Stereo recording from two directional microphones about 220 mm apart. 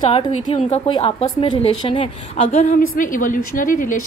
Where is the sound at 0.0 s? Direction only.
25° left (ahead or behind).